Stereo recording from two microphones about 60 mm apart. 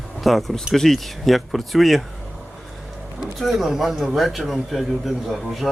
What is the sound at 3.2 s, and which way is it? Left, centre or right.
Speech, centre.